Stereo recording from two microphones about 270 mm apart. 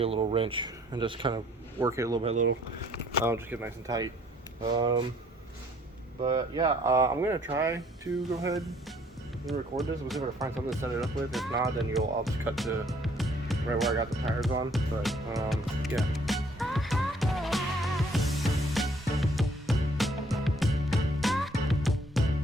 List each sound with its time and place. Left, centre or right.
0.0 s speech: right
6.2 s speech: centre
9.5 s speech: centre
15.4 s music: centre